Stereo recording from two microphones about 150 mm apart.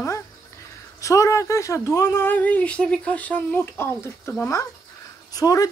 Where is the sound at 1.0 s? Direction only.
20° left (ahead or behind).